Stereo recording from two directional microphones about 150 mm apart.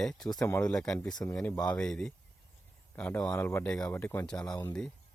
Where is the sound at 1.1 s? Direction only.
20° left (ahead or behind).